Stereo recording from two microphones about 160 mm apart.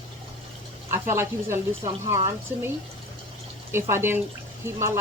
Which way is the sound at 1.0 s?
15° right (ahead or behind).